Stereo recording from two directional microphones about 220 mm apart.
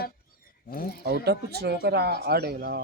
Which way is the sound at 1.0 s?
45° right (ahead or behind).